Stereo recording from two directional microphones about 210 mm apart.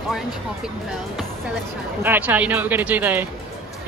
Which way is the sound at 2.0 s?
10° right (ahead or behind).